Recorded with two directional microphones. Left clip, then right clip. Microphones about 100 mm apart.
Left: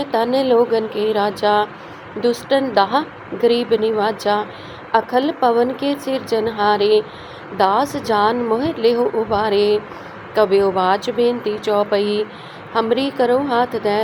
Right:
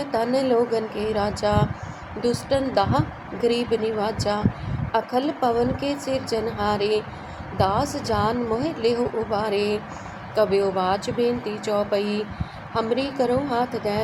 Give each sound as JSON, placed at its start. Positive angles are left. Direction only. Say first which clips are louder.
{"t": 0.0, "sound": "a woman's voice", "louder": "left 5 dB", "side_deg": 35}